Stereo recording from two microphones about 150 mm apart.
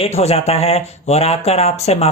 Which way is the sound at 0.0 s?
45° left (ahead or behind).